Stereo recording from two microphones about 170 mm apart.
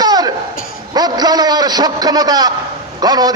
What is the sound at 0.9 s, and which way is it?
A man's voice, 25° right (ahead or behind).